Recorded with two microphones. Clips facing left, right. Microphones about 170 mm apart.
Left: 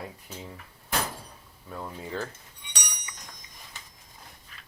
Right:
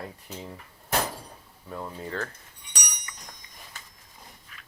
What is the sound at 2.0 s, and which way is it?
Speech, 10° left (ahead or behind).